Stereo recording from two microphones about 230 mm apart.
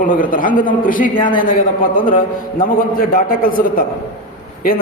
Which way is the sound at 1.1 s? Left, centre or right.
Left.